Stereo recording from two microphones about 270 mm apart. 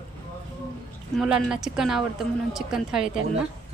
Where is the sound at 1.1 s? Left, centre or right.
Centre.